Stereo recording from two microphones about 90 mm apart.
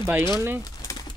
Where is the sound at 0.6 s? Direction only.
40° left (ahead or behind).